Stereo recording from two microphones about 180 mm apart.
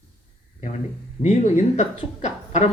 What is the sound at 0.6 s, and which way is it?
Speech, 40° left (ahead or behind).